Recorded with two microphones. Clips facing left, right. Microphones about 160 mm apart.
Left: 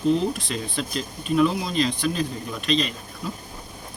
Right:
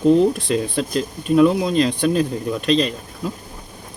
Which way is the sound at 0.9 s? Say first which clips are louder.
Right 7 dB; 40° right (ahead or behind).